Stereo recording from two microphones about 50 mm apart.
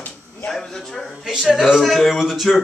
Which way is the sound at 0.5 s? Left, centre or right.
Centre.